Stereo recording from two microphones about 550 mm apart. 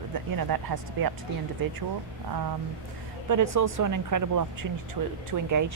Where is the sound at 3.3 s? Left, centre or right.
Right.